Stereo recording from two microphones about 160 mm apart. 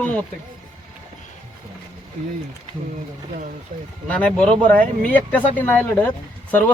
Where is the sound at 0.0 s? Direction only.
10° left (ahead or behind).